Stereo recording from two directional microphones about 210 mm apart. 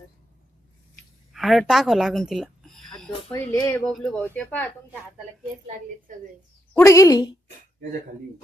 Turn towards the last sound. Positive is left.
turn(degrees=15)  # may be behind; listen again after turning